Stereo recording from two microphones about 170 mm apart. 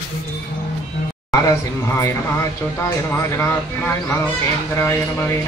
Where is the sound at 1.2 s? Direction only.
15° left (ahead or behind).